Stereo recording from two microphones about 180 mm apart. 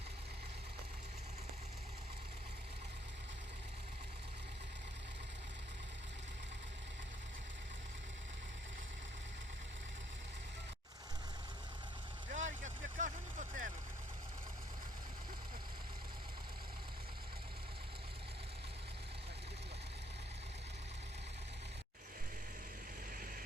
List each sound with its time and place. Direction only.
12.3 s vehicle: 40° right (ahead or behind)